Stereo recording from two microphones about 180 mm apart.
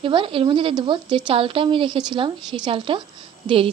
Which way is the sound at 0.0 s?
30° right (ahead or behind).